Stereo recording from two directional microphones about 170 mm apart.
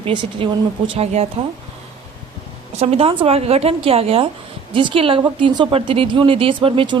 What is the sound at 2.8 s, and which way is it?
A woman's voice, 35° right (ahead or behind).